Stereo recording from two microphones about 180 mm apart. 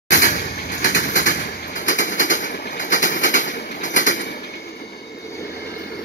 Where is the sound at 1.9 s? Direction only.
90° left.